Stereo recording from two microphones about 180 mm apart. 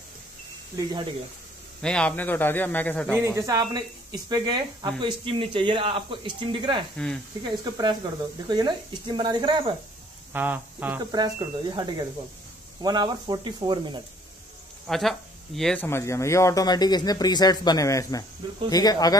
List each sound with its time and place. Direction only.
1.8 s speech: 5° left (ahead or behind)
3.2 s speech: 15° right (ahead or behind)
10.3 s speech: 10° right (ahead or behind)
11.0 s speech: 20° right (ahead or behind)
14.9 s speech: centre (ahead or behind); by 19.1 s 20° left (ahead or behind)